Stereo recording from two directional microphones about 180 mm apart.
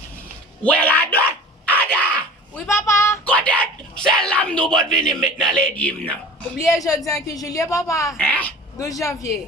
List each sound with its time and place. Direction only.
0.6 s a sound: 10° left (ahead or behind)
6.7 s a woman's voice: 20° left (ahead or behind)
8.0 s speech: 5° left (ahead or behind)